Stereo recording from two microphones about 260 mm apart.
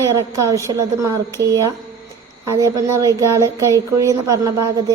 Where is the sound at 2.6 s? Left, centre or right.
Centre.